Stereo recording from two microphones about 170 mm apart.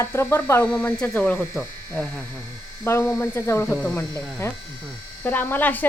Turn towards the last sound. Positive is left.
turn(degrees=10)  # may be behind; listen again after turning